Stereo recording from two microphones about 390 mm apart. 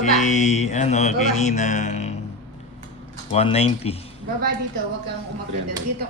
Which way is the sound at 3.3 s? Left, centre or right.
Centre.